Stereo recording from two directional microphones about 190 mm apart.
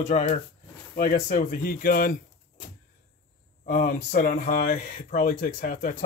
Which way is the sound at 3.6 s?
45° left (ahead or behind).